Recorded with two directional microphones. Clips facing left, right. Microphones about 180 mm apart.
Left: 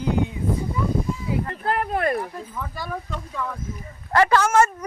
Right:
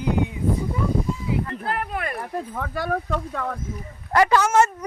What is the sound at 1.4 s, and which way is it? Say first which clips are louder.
Speech: left 3 dB; 40° left (ahead or behind).